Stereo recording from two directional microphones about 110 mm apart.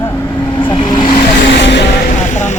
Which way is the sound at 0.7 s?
40° left (ahead or behind).